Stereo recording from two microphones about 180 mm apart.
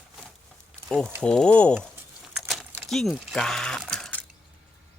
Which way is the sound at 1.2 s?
5° left (ahead or behind).